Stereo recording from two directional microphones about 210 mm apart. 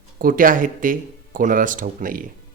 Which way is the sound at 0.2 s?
40° right (ahead or behind).